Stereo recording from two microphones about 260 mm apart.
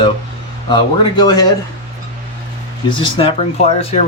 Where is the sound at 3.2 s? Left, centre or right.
Left.